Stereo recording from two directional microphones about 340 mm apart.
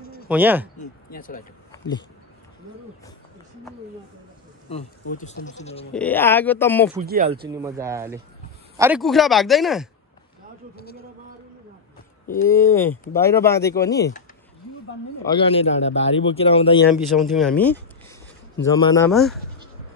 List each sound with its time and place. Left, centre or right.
0.3 s speech: centre
0.7 s speech: left
1.7 s a sound: centre
4.6 s speech: centre
5.9 s speech: centre
7.0 s speech: right
7.4 s speech: centre
12.4 s speech: centre
15.2 s speech: centre
16.9 s speech: centre